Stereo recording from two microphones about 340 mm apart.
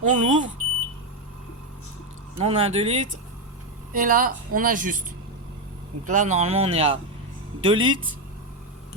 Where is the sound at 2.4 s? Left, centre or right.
Centre.